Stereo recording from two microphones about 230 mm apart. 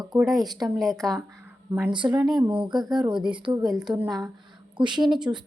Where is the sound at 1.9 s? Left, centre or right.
Centre.